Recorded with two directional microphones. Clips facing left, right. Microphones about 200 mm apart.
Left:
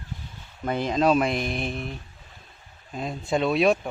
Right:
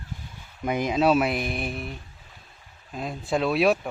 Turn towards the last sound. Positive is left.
turn(degrees=0)  # may be behind; listen again after turning